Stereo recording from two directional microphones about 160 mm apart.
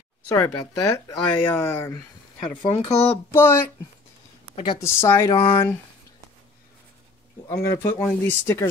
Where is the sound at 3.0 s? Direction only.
15° left (ahead or behind).